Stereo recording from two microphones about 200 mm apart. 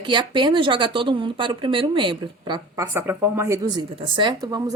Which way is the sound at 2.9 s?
10° right (ahead or behind).